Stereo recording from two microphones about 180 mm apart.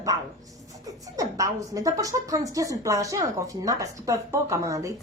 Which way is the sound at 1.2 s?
20° right (ahead or behind).